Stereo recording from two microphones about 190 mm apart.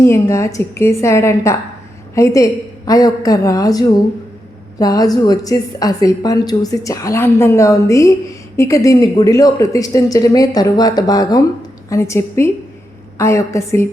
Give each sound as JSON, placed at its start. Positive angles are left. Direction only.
{"t": 0.0, "sound": "a woman's voice", "side_deg": 15}